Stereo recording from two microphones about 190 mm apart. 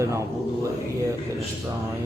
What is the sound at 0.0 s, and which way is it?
Speech, 15° right (ahead or behind).